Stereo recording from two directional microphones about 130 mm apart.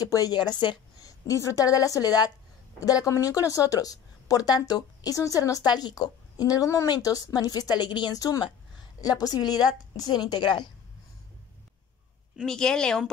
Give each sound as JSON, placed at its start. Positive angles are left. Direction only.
{"t": 0.0, "sound": "a woman's voice", "side_deg": 30}
{"t": 12.4, "sound": "speech", "side_deg": 5}